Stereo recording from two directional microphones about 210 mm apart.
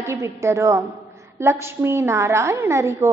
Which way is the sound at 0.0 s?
15° right (ahead or behind).